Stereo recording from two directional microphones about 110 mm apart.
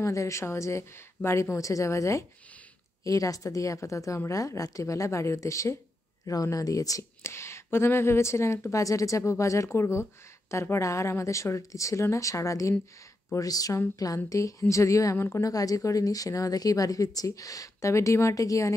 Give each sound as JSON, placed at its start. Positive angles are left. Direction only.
{"t": 0.0, "sound": "a woman's voice", "side_deg": 30}